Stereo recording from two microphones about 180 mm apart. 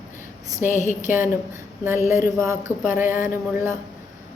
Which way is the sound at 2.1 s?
15° right (ahead or behind).